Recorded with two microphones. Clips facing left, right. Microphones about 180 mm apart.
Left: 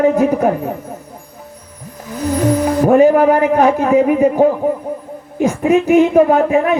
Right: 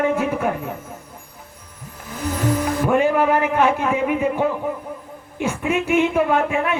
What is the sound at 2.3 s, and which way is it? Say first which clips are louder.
A woman's voice: left 7 dB; 40° left (ahead or behind).